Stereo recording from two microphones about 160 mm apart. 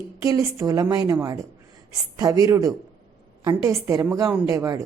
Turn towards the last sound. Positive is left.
turn(degrees=-20)  # may be behind; listen again after turning